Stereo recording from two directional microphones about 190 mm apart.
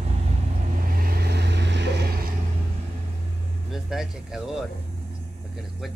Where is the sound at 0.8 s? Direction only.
50° right (ahead or behind).